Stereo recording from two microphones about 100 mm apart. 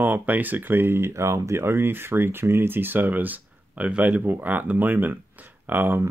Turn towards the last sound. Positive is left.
turn(degrees=-20)  # may be behind; listen again after turning